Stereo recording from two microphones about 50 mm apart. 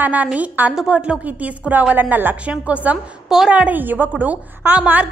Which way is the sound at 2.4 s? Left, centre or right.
Right.